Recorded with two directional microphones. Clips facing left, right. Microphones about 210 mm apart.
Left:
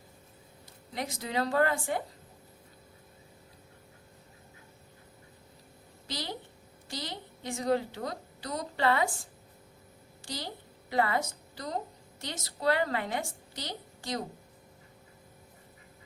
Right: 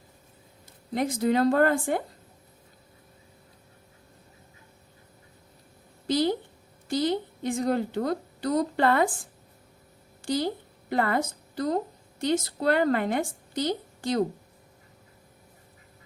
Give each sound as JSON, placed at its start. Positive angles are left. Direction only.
{"t": 0.9, "sound": "speech", "side_deg": -50}
{"t": 6.1, "sound": "a sound", "side_deg": -50}
{"t": 10.3, "sound": "a woman's voice", "side_deg": -55}